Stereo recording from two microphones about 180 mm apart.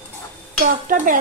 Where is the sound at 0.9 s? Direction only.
50° right (ahead or behind).